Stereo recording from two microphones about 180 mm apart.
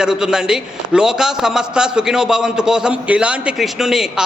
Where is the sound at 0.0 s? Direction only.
5° right (ahead or behind).